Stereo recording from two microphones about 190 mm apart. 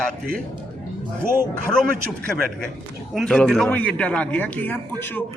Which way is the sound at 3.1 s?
Centre (ahead or behind).